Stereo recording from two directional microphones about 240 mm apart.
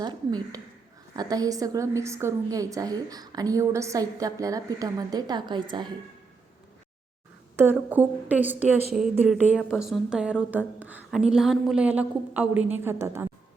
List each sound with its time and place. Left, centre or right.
0.0 s a woman's voice: centre
7.5 s a woman's voice: centre